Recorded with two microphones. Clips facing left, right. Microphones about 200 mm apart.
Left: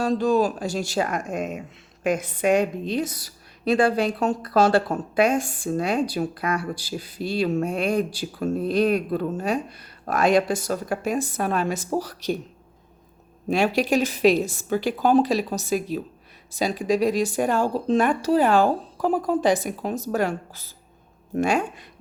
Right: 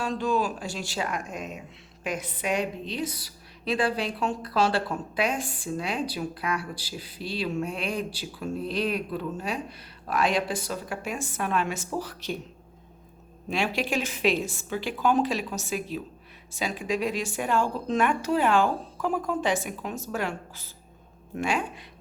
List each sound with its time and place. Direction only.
0.0 s a woman's voice: 40° left (ahead or behind)
13.5 s speech: 40° left (ahead or behind)